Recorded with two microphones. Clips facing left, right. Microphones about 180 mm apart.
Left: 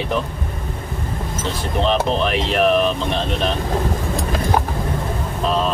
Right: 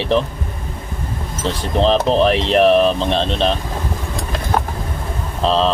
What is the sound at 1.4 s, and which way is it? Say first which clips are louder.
Speech: right 5 dB; 35° right (ahead or behind).